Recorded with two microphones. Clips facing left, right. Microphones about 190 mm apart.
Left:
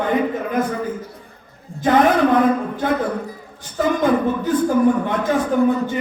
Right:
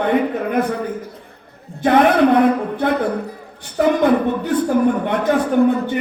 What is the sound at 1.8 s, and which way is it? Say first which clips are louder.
Speech: right 1 dB; 65° right (ahead or behind).